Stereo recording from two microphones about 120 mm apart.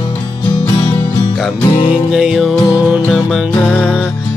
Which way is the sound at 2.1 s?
5° right (ahead or behind).